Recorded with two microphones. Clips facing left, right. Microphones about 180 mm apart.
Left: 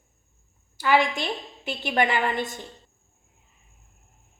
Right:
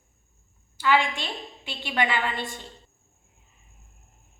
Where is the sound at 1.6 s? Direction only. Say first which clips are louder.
Left 3 dB; 45° left (ahead or behind).